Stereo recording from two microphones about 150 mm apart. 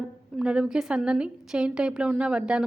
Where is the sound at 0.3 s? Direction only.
5° right (ahead or behind).